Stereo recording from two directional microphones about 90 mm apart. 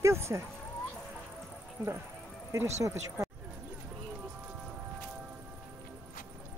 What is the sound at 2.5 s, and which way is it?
Speech, 30° right (ahead or behind).